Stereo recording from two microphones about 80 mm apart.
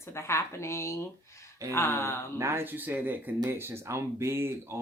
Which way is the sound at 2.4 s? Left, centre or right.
Right.